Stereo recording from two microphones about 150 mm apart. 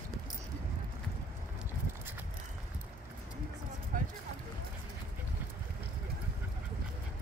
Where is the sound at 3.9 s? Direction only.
65° right (ahead or behind).